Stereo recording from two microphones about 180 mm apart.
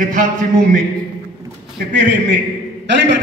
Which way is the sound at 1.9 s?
85° right.